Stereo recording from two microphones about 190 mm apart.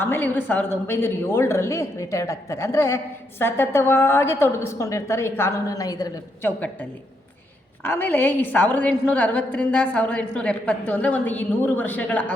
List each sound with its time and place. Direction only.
0.0 s a woman's voice: 10° left (ahead or behind)
7.9 s a woman's voice: 10° left (ahead or behind)